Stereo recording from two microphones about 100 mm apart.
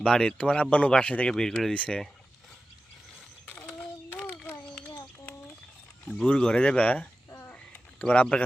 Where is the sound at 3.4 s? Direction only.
15° left (ahead or behind).